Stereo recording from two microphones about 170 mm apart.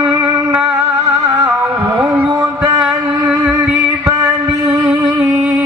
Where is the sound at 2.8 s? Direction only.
10° right (ahead or behind).